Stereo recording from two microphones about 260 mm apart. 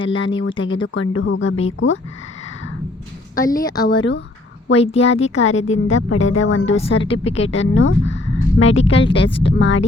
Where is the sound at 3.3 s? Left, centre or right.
Left.